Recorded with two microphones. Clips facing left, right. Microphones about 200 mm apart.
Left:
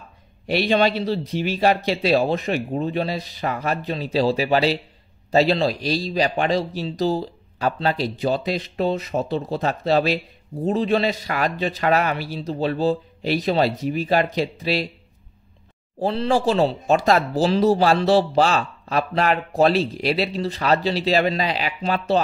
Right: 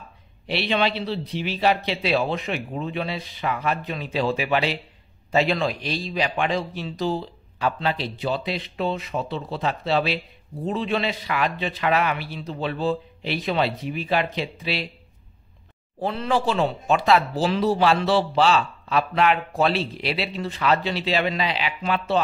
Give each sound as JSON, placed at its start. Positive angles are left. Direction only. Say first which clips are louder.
{"t": 0.5, "sound": "speech", "louder": "left 5 dB", "side_deg": 40}
{"t": 16.0, "sound": "speech", "louder": "left 3 dB", "side_deg": 35}